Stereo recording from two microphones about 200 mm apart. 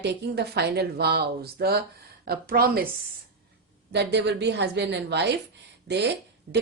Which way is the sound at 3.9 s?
55° right (ahead or behind).